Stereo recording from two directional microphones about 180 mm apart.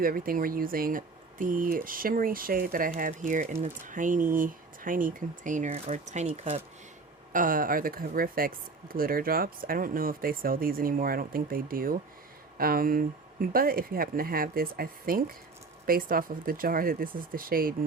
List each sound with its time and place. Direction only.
0.0 s speech: 55° right (ahead or behind); by 6.6 s 35° right (ahead or behind)
7.3 s speech: 50° right (ahead or behind)